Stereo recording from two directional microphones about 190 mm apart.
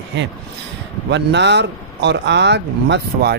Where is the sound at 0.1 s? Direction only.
70° right (ahead or behind).